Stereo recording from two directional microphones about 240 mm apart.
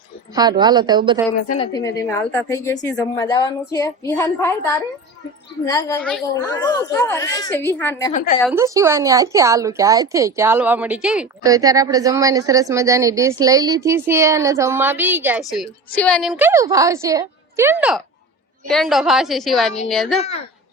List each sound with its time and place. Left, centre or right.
0.3 s speech: centre
1.5 s a woman's voice: centre
5.6 s a woman's voice: centre
8.1 s a woman's voice: left
8.5 s speech: centre
11.4 s a woman's voice: centre